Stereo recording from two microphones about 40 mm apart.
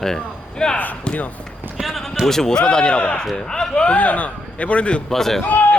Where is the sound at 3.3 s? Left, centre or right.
Centre.